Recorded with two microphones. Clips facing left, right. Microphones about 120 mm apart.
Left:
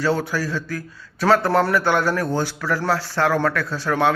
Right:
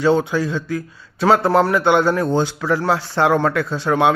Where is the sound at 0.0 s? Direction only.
20° right (ahead or behind).